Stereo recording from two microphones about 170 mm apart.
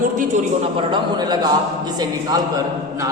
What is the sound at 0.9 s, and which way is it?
A man's voice, 25° right (ahead or behind).